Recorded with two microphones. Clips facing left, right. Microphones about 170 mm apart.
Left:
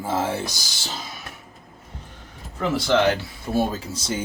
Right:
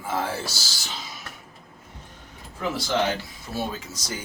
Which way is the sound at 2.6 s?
70° left (ahead or behind).